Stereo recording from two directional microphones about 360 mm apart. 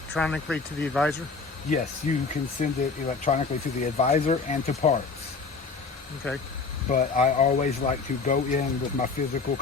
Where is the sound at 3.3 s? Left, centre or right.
Centre.